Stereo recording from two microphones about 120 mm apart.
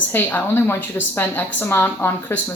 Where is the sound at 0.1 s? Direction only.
15° left (ahead or behind).